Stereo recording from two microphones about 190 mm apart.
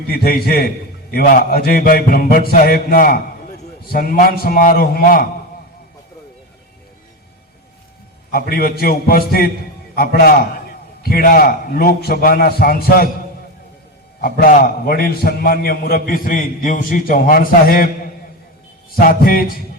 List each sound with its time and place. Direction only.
0.1 s a man's voice: 55° left (ahead or behind)
8.3 s a man's voice: 50° left (ahead or behind)
14.2 s a man's voice: 50° left (ahead or behind)
18.9 s a man's voice: 50° left (ahead or behind)